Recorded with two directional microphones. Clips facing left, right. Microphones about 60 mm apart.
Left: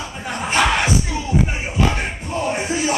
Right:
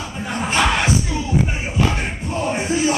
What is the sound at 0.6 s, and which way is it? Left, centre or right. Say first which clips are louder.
Music: left 1 dB; centre.